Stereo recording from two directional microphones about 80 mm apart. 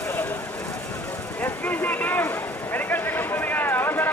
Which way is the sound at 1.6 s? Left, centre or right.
Left.